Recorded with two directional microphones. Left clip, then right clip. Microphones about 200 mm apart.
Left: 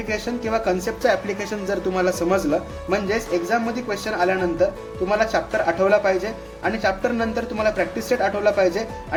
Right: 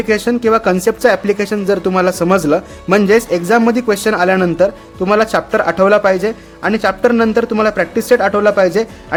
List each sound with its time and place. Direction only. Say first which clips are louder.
0.1 s speech: right 11 dB; 50° right (ahead or behind)